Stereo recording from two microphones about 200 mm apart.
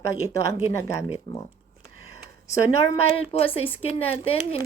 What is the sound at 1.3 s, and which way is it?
Speech, 55° right (ahead or behind).